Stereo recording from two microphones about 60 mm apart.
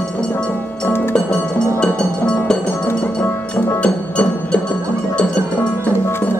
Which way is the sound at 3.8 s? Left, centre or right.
Left.